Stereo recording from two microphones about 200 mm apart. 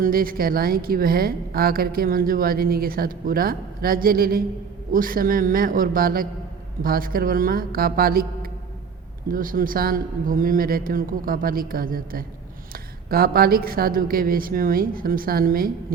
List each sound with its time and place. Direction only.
0.0 s a woman's voice: 45° right (ahead or behind)